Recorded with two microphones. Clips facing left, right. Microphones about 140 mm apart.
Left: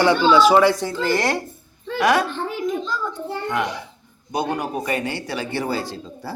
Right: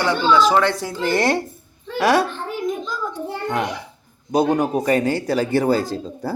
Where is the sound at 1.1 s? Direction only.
25° right (ahead or behind).